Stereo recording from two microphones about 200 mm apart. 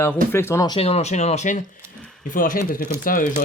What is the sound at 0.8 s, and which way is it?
Speech, 30° left (ahead or behind).